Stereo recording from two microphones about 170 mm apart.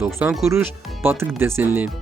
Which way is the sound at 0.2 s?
10° right (ahead or behind).